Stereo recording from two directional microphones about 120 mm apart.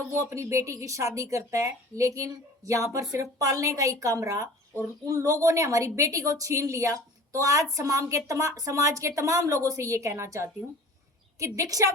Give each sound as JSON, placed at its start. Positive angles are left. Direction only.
{"t": 0.1, "sound": "speech", "side_deg": -25}